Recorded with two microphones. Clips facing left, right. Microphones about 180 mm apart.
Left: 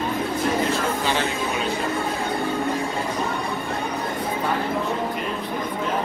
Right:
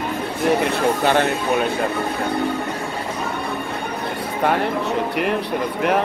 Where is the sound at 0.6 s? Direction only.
65° right (ahead or behind).